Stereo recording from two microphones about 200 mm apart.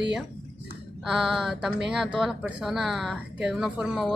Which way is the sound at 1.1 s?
Centre (ahead or behind).